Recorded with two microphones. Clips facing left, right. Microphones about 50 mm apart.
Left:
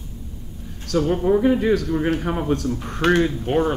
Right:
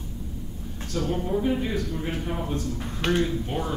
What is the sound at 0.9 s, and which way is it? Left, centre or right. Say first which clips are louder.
A man's voice: left 9 dB; left.